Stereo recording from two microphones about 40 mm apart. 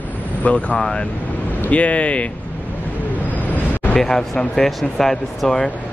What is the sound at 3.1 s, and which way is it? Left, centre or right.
Vehicle, left.